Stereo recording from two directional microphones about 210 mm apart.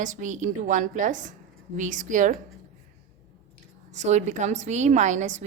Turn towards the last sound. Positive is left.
turn(degrees=-35)  # may be behind; listen again after turning